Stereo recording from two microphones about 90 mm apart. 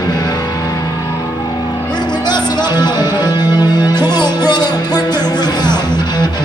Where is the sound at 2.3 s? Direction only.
55° left (ahead or behind).